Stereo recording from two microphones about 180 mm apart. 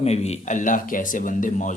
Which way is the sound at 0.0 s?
35° left (ahead or behind).